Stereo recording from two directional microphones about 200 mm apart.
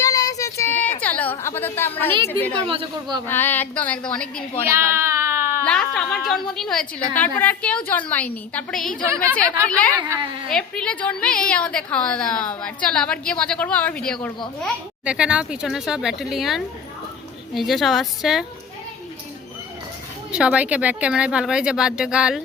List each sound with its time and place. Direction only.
0.0 s child singing: 15° left (ahead or behind)
1.0 s a sound: 5° left (ahead or behind)
2.6 s speech: 25° right (ahead or behind)
3.2 s a woman's voice: 10° left (ahead or behind)
4.7 s baby cry: 10° right (ahead or behind)
5.6 s a woman's voice: 5° left (ahead or behind)
10.0 s speech: 25° right (ahead or behind)
10.5 s a woman's voice: 5° left (ahead or behind)
20.3 s a woman's voice: 5° right (ahead or behind)